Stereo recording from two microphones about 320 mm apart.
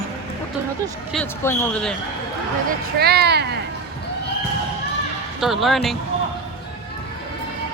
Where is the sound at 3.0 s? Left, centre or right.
Right.